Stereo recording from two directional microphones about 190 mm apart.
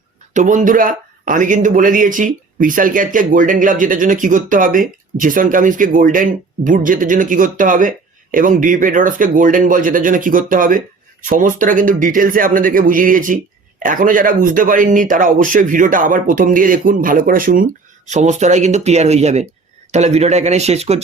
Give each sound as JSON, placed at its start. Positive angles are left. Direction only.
{"t": 0.3, "sound": "speech", "side_deg": -40}